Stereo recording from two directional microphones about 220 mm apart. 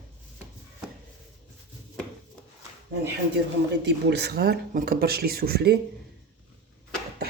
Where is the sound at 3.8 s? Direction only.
50° right (ahead or behind).